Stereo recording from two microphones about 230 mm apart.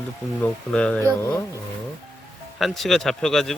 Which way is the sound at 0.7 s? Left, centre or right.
Centre.